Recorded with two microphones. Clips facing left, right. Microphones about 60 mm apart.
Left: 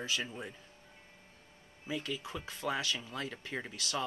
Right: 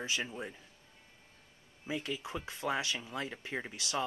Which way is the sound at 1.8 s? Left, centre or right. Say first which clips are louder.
Right 1 dB; centre.